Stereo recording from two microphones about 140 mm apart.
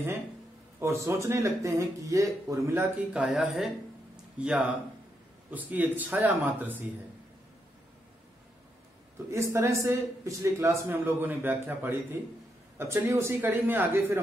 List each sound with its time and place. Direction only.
0.7 s a man's voice: 20° right (ahead or behind)
3.1 s a man's voice: 5° right (ahead or behind)
9.3 s a man's voice: 20° right (ahead or behind)